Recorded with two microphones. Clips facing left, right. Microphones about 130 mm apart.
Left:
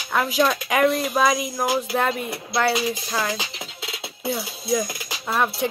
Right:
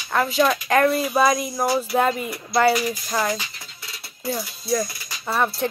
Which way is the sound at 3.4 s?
85° left.